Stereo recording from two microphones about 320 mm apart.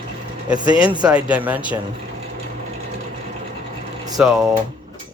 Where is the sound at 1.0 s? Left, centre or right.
Centre.